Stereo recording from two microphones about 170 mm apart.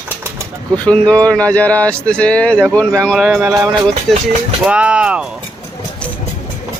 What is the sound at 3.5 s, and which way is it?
Speech, 20° right (ahead or behind).